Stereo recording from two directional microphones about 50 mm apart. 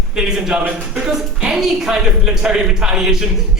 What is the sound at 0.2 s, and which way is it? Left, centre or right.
A man's voice, centre.